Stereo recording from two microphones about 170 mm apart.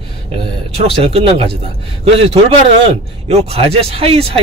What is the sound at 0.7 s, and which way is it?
A man's voice, 35° right (ahead or behind).